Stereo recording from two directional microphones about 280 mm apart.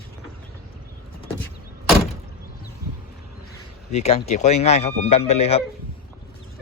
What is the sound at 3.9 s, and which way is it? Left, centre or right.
Speech, left.